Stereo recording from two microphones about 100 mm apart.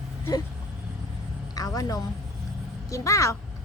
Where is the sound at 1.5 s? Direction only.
35° left (ahead or behind).